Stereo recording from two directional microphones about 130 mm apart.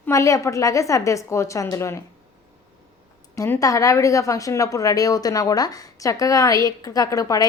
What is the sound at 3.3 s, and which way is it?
Speech, 20° left (ahead or behind).